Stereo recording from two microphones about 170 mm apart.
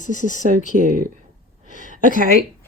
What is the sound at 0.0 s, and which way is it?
Speech, 50° left (ahead or behind).